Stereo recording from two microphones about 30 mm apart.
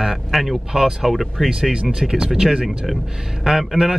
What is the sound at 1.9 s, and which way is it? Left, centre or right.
A man's voice, right.